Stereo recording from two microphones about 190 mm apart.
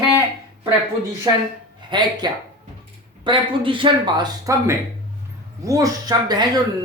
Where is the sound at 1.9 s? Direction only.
25° right (ahead or behind).